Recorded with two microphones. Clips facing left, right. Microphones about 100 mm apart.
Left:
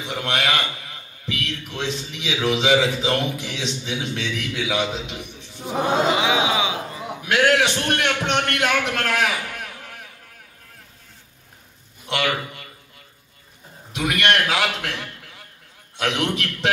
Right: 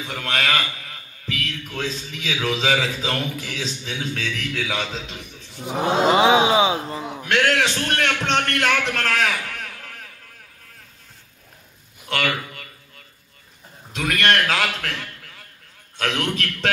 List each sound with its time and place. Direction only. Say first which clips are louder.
0.0 s a man's voice: left 1 dB; 20° left (ahead or behind)
6.1 s speech: right 5 dB; 35° right (ahead or behind)
7.2 s a man's voice: left 2 dB; 10° left (ahead or behind)
12.1 s a man's voice: left 1 dB; 20° left (ahead or behind)
13.9 s a man's voice: even; 15° left (ahead or behind)